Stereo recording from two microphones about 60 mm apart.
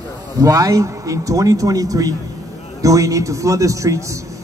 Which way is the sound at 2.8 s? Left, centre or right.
Right.